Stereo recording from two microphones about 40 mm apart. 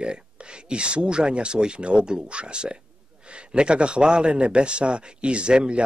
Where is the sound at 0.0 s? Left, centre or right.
Right.